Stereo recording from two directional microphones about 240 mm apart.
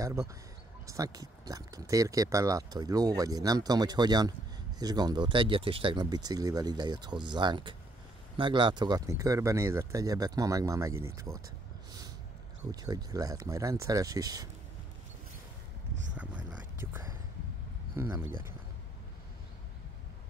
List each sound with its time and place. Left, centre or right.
0.0 s speech: centre
12.8 s speech: centre
16.2 s a sound: centre
17.9 s speech: centre